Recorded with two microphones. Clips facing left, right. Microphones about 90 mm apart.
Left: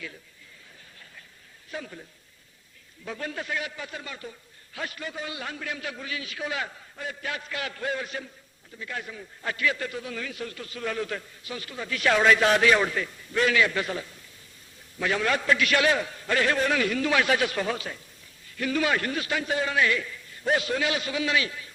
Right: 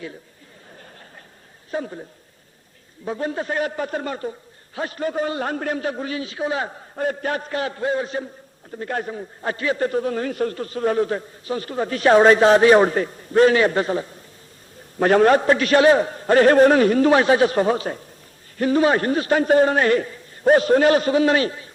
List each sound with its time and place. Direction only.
1.7 s a man's voice: 35° right (ahead or behind)
8.7 s a man's voice: 45° right (ahead or behind)
14.9 s a man's voice: 45° right (ahead or behind)